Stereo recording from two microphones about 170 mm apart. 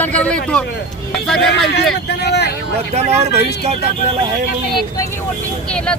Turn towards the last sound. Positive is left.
turn(degrees=5)  # may be behind; listen again after turning